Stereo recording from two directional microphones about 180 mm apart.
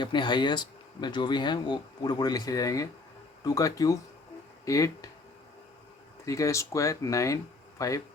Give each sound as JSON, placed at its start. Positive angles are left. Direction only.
{"t": 0.0, "sound": "speech", "side_deg": 25}
{"t": 6.2, "sound": "speech", "side_deg": 15}